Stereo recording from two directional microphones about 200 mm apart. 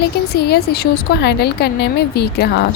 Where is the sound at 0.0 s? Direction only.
55° left (ahead or behind).